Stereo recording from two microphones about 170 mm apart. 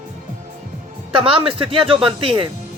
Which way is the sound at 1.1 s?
30° right (ahead or behind).